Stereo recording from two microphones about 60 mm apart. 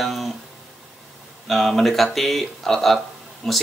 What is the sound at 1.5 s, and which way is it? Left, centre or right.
Speech, centre.